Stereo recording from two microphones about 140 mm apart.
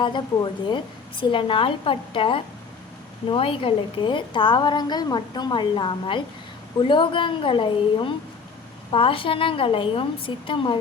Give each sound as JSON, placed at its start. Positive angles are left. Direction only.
{"t": 0.0, "sound": "a woman's voice", "side_deg": 35}